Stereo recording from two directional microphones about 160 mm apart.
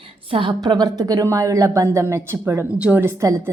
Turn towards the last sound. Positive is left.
turn(degrees=-15)  # may be behind; listen again after turning